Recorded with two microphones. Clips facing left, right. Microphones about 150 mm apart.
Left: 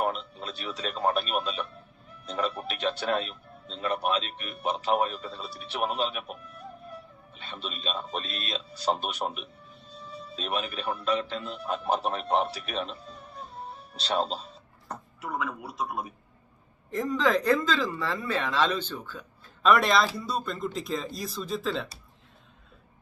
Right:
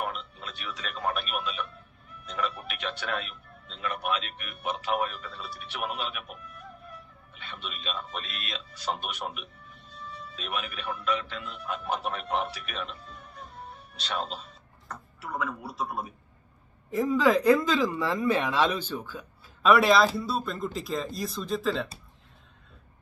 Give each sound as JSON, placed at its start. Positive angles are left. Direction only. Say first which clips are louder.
{"t": 0.0, "sound": "speech", "louder": "left 5 dB", "side_deg": 35}
{"t": 15.2, "sound": "speech", "louder": "even", "side_deg": 0}